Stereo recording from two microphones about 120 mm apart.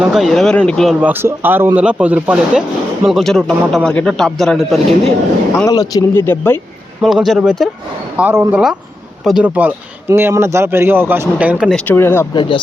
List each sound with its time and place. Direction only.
0.0 s speech: centre (ahead or behind)
1.0 s speech: 15° right (ahead or behind); by 5.1 s centre (ahead or behind)
5.6 s speech: 30° left (ahead or behind)
6.2 s speech: 15° left (ahead or behind)
7.0 s speech: centre (ahead or behind)
8.1 s speech: 15° right (ahead or behind)
11.9 s speech: 20° left (ahead or behind)
12.3 s speech: 40° left (ahead or behind)